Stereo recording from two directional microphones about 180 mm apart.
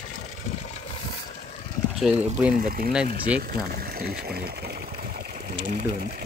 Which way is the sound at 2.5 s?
50° right (ahead or behind).